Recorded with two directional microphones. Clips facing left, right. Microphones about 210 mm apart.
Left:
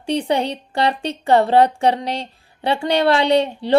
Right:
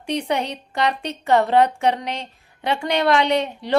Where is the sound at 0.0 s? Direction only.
30° left (ahead or behind).